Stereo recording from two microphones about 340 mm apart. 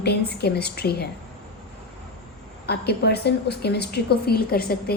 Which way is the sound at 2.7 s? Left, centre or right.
Left.